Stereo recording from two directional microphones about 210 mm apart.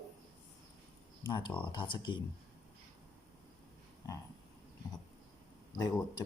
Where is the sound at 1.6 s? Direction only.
25° left (ahead or behind).